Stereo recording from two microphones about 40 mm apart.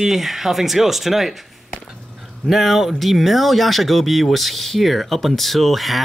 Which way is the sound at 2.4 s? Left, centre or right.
Centre.